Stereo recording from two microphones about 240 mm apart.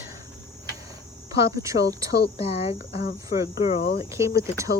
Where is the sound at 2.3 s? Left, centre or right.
Left.